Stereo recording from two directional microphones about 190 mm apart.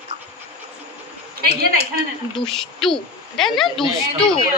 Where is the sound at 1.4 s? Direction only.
55° right (ahead or behind).